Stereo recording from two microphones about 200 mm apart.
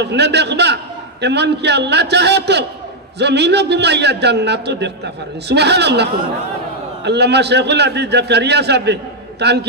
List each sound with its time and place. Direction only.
0.0 s a man's voice: 60° right (ahead or behind)
7.1 s a man's voice: 55° right (ahead or behind)